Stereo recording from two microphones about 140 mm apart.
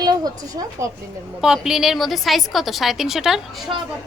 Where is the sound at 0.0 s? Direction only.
30° right (ahead or behind).